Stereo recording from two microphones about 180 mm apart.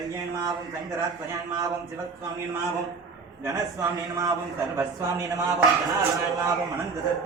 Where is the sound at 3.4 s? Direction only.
20° right (ahead or behind).